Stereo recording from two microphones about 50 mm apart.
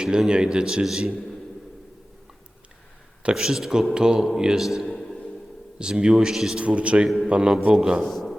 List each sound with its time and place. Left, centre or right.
0.0 s a man's voice: centre
3.2 s a man's voice: centre
4.9 s a sound: centre
5.8 s a man's voice: centre
6.6 s a man's voice: right
8.1 s a sound: centre